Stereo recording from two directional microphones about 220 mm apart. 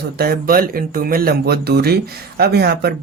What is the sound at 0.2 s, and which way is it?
Speech, 45° right (ahead or behind).